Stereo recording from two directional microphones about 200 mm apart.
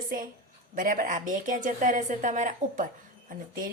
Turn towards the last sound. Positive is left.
turn(degrees=-40)  # may be behind; listen again after turning